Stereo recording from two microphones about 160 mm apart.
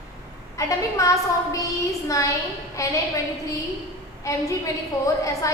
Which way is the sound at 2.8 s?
20° left (ahead or behind).